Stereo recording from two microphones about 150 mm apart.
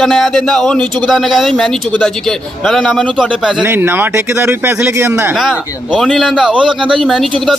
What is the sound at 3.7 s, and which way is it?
Speech, 15° right (ahead or behind).